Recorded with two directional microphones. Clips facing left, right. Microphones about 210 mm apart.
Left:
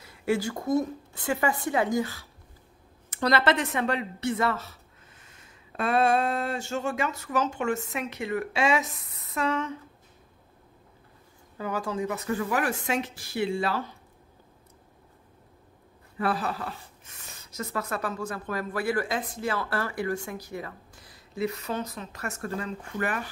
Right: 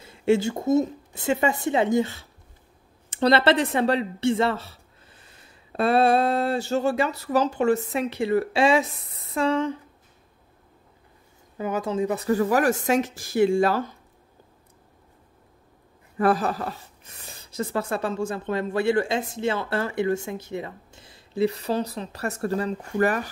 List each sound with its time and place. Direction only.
0.0 s speech: 25° right (ahead or behind)
5.2 s a sound: 35° right (ahead or behind)
11.5 s speech: 20° right (ahead or behind); by 13.9 s 45° right (ahead or behind)
16.2 s speech: 45° right (ahead or behind)